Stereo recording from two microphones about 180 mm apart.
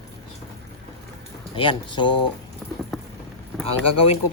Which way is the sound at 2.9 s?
Centre (ahead or behind).